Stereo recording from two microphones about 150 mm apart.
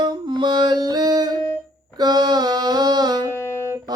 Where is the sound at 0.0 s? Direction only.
30° right (ahead or behind).